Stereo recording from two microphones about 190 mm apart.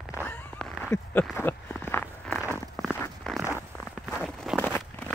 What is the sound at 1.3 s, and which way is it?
Walk, 10° left (ahead or behind).